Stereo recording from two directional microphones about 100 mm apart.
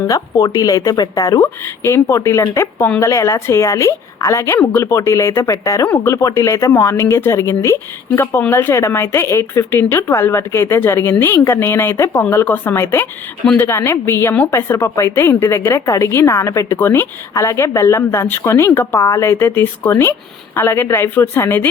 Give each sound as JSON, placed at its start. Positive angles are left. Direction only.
{"t": 0.1, "sound": "a woman's voice", "side_deg": 35}
{"t": 1.6, "sound": "a woman's voice", "side_deg": 25}